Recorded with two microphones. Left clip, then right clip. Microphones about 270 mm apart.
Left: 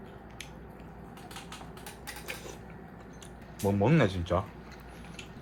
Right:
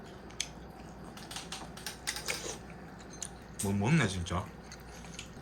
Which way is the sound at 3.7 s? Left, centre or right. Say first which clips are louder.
Left 6 dB; centre.